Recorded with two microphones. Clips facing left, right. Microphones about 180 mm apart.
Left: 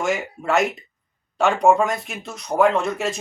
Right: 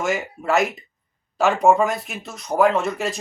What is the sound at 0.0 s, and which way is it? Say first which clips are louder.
Speech: even; centre (ahead or behind).